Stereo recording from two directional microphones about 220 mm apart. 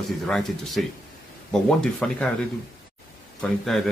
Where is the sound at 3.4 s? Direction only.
Centre (ahead or behind).